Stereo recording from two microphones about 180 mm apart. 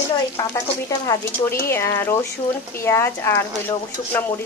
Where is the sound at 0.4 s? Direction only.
15° left (ahead or behind).